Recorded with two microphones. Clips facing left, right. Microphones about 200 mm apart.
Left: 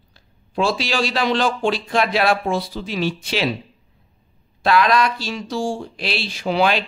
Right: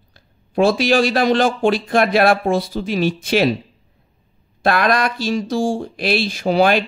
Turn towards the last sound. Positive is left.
turn(degrees=-45)  # may be behind; listen again after turning